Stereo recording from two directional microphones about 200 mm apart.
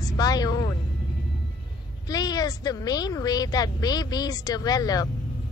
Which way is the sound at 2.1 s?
20° left (ahead or behind).